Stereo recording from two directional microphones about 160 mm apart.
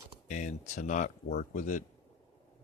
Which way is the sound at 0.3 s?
50° left (ahead or behind).